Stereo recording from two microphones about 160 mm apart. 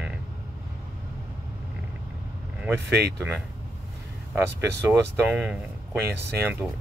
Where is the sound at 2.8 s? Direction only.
90° right.